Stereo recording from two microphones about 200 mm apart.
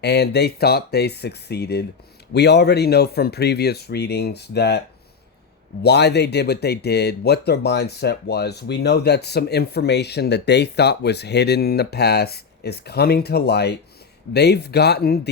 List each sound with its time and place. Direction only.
0.0 s speech: 55° left (ahead or behind)
5.8 s speech: 55° left (ahead or behind)